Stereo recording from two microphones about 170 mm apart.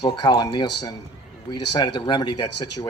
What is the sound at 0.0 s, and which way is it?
Speech, 30° left (ahead or behind).